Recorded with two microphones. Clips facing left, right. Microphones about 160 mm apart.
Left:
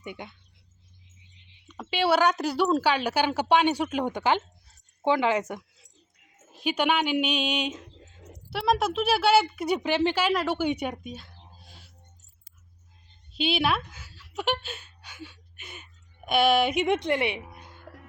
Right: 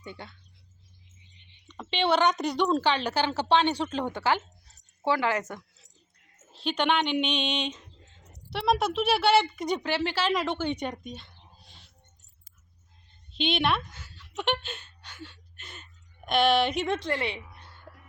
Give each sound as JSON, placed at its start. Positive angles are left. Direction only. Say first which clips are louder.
{"t": 0.0, "sound": "a woman's voice", "louder": "left 3 dB", "side_deg": 15}
{"t": 1.6, "sound": "a woman's voice", "louder": "left 2 dB", "side_deg": 5}
{"t": 10.3, "sound": "a woman's voice", "louder": "left 2 dB", "side_deg": 5}
{"t": 11.6, "sound": "music", "louder": "left 4 dB", "side_deg": 5}
{"t": 13.3, "sound": "a woman's voice", "louder": "left 1 dB", "side_deg": 5}
{"t": 17.5, "sound": "music", "louder": "left 4 dB", "side_deg": 15}